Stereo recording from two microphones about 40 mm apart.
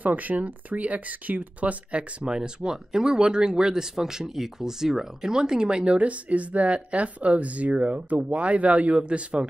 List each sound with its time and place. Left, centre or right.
0.0 s speech: right
2.2 s speech: centre